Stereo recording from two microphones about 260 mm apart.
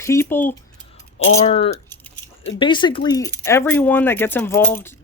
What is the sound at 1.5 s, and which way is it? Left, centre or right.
Speech, left.